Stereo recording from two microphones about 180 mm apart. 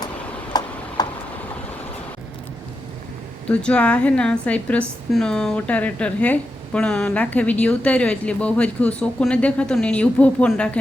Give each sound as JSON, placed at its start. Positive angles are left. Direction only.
{"t": 0.5, "sound": "tick-tock", "side_deg": 20}
{"t": 1.0, "sound": "a sound", "side_deg": 20}
{"t": 3.5, "sound": "a woman's voice", "side_deg": 5}